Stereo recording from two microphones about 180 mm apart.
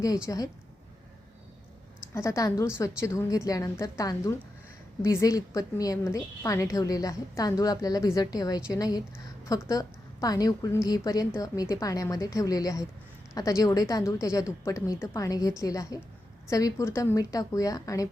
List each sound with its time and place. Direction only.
0.3 s a woman's voice: 20° left (ahead or behind)
2.1 s a woman's voice: 15° left (ahead or behind)